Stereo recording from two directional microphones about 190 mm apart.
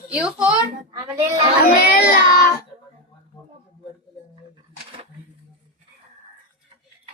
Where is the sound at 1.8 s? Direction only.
50° left (ahead or behind).